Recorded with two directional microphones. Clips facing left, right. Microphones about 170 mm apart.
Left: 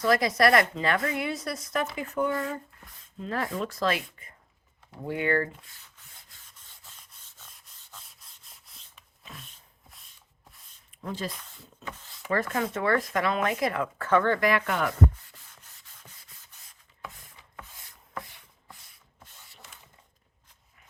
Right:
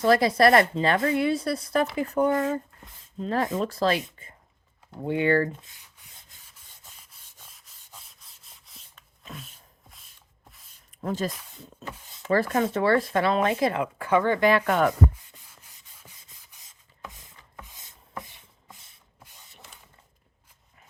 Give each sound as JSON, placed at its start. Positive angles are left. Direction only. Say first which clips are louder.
{"t": 0.0, "sound": "speech", "louder": "right 4 dB", "side_deg": -30}
{"t": 2.4, "sound": "speech", "louder": "right 6 dB", "side_deg": -25}
{"t": 8.0, "sound": "rub", "louder": "even", "side_deg": 0}
{"t": 11.0, "sound": "speech", "louder": "right 6 dB", "side_deg": -45}
{"t": 11.9, "sound": "speech", "louder": "even", "side_deg": -10}
{"t": 12.3, "sound": "speech", "louder": "right 5 dB", "side_deg": -35}
{"t": 13.8, "sound": "speech", "louder": "right 1 dB", "side_deg": -10}
{"t": 14.3, "sound": "speech", "louder": "right 4 dB", "side_deg": -25}
{"t": 14.7, "sound": "rub", "louder": "right 6 dB", "side_deg": -45}
{"t": 16.0, "sound": "sanding", "louder": "right 1 dB", "side_deg": -10}
{"t": 17.6, "sound": "rub", "louder": "even", "side_deg": -20}
{"t": 18.2, "sound": "a sound", "louder": "even", "side_deg": -20}